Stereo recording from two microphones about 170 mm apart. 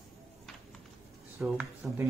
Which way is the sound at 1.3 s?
10° right (ahead or behind).